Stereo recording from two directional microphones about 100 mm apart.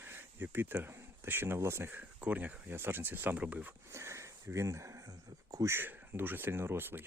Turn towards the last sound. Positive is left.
turn(degrees=-20)  # may be behind; listen again after turning